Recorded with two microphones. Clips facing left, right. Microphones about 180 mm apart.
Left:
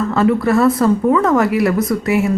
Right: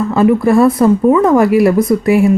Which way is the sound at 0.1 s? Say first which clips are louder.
Right 5 dB; 20° right (ahead or behind).